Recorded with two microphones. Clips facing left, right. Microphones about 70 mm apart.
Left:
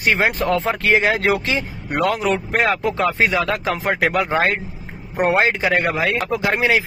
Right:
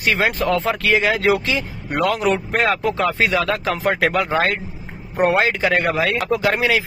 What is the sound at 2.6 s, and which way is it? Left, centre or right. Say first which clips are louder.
A man's voice: even; centre.